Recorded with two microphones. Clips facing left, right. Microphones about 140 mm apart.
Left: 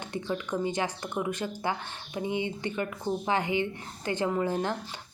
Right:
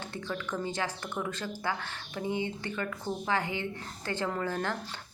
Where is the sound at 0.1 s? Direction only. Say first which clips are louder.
Left 6 dB; 15° left (ahead or behind).